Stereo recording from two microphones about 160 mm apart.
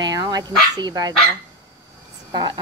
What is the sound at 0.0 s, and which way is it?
Dog, 25° right (ahead or behind).